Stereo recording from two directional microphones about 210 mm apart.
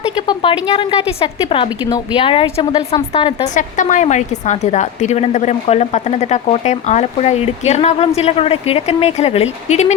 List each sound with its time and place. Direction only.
0.2 s a sound: 25° left (ahead or behind)
0.7 s a woman's voice: 25° left (ahead or behind)
3.5 s a woman's voice: 35° left (ahead or behind)